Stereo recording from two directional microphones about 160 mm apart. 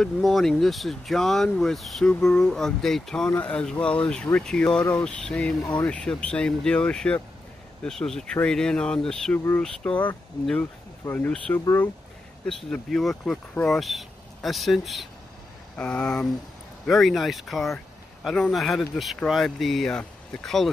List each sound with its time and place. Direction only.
0.0 s speech: centre (ahead or behind)
12.4 s speech: 5° left (ahead or behind)